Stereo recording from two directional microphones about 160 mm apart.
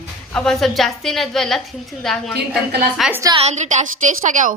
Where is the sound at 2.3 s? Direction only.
90° right.